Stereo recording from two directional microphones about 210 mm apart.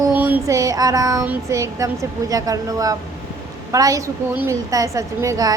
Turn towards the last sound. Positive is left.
turn(degrees=-15)  # may be behind; listen again after turning